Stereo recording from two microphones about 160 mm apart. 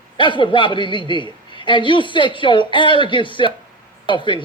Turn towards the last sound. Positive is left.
turn(degrees=30)  # may be behind; listen again after turning